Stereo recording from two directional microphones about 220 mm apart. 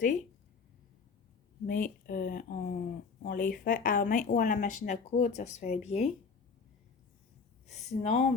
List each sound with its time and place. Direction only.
1.6 s speech: 40° left (ahead or behind)
7.7 s speech: 30° left (ahead or behind)